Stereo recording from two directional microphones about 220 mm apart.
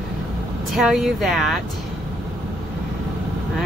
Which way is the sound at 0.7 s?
Centre (ahead or behind).